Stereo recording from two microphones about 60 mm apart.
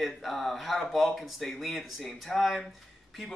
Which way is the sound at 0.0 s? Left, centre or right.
Centre.